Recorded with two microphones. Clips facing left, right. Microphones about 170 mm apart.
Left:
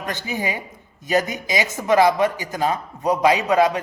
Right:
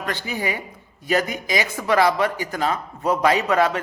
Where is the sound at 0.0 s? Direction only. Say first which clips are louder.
Even; 20° left (ahead or behind).